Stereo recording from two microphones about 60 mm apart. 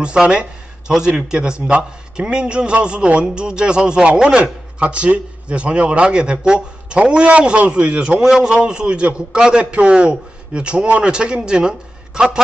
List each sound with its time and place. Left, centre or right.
0.0 s a man's voice: centre
8.2 s a man's voice: centre